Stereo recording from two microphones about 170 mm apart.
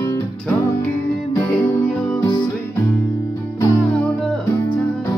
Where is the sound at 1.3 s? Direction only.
10° left (ahead or behind).